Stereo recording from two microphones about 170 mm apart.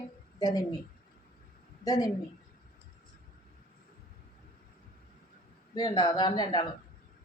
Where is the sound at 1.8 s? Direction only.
20° left (ahead or behind).